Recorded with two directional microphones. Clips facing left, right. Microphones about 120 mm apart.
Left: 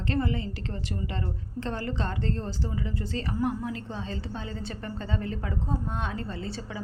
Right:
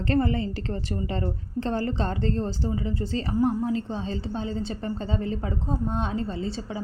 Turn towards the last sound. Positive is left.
turn(degrees=-25)  # may be behind; listen again after turning